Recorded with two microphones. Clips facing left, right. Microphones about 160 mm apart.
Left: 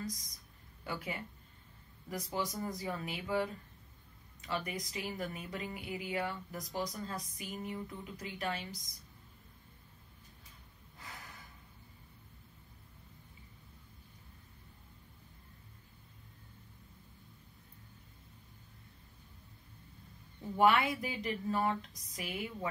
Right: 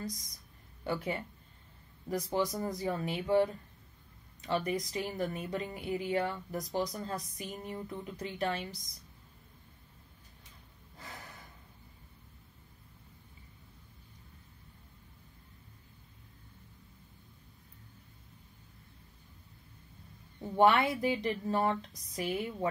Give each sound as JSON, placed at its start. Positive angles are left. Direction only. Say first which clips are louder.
{"t": 0.8, "sound": "speech", "louder": "right 6 dB", "side_deg": -30}
{"t": 4.5, "sound": "speech", "louder": "right 6 dB", "side_deg": -30}
{"t": 20.3, "sound": "speech", "louder": "right 3 dB", "side_deg": -30}